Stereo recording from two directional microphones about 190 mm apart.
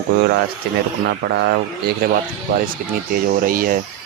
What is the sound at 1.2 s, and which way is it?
Speech, 70° right (ahead or behind).